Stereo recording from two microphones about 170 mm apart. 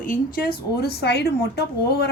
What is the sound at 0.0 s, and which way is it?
Speech, 55° left (ahead or behind).